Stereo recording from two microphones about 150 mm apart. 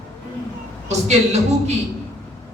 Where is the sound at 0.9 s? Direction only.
50° right (ahead or behind).